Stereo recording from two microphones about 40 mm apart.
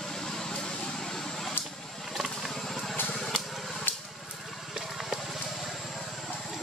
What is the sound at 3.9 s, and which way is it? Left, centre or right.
Vehicle, left.